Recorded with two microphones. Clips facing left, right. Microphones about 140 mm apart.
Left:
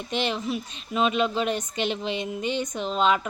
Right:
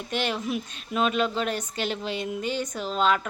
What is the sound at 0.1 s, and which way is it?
A woman's voice, 5° right (ahead or behind).